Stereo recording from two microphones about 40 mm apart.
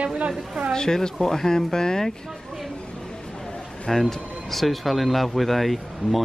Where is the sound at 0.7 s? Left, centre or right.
Centre.